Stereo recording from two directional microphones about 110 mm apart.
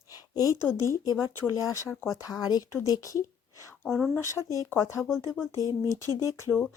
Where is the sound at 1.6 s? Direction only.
30° left (ahead or behind).